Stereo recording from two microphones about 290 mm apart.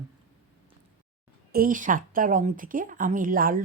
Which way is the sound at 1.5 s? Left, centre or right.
Right.